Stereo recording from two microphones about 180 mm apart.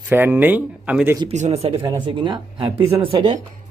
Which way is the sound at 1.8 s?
25° right (ahead or behind).